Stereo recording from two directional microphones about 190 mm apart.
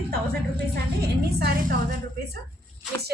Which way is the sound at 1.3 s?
55° right (ahead or behind).